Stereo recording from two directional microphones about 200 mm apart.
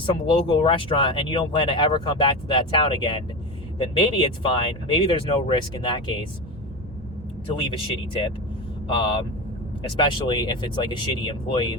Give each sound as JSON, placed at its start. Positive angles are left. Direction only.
{"t": 0.0, "sound": "speech", "side_deg": 25}
{"t": 7.5, "sound": "speech", "side_deg": 25}